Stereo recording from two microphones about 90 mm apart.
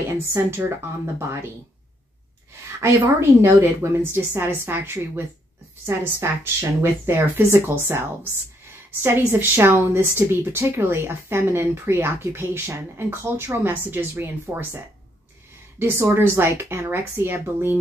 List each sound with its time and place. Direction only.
0.1 s speech: 30° right (ahead or behind)
2.8 s speech: 30° right (ahead or behind)
15.8 s speech: 25° right (ahead or behind)